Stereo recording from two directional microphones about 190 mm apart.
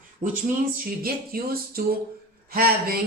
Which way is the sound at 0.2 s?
45° right (ahead or behind).